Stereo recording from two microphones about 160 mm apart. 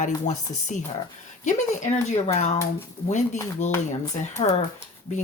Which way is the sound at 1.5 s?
45° left (ahead or behind).